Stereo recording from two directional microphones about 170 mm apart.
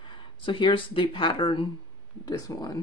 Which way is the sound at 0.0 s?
30° left (ahead or behind).